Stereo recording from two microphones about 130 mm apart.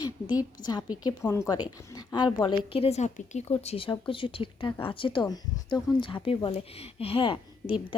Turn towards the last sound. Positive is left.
turn(degrees=40)  # may be behind; listen again after turning